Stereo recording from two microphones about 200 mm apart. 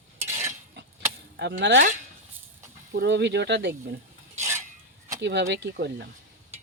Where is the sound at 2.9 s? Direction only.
60° right (ahead or behind).